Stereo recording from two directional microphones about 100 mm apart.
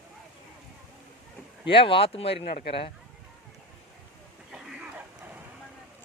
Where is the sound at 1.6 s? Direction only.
60° left (ahead or behind).